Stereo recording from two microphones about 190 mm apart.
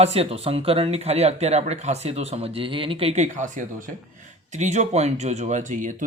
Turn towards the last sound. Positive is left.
turn(degrees=-40)  # may be behind; listen again after turning